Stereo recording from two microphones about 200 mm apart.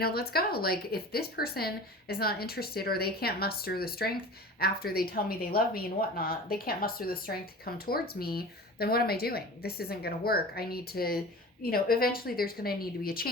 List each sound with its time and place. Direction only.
0.0 s a woman's voice: 50° left (ahead or behind)